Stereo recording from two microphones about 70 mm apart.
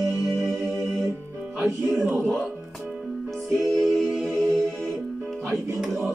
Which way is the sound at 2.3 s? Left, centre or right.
Centre.